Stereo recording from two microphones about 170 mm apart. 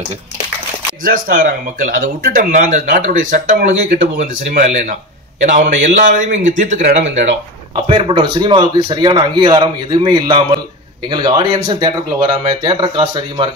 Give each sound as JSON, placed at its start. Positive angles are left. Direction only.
{"t": 1.0, "sound": "speech", "side_deg": -55}
{"t": 7.7, "sound": "a man's voice", "side_deg": -35}